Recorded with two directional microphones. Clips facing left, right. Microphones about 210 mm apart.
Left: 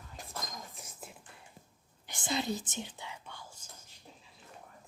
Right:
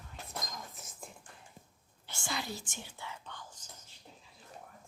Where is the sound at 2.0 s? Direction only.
20° left (ahead or behind).